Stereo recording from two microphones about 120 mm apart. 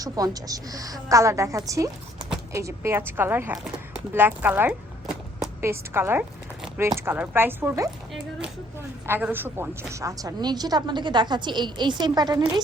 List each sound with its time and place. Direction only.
0.0 s a woman's voice: 30° right (ahead or behind)
9.0 s a woman's voice: 20° right (ahead or behind); by 12.6 s 35° right (ahead or behind)